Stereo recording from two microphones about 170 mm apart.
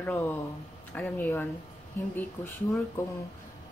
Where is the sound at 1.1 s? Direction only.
15° left (ahead or behind).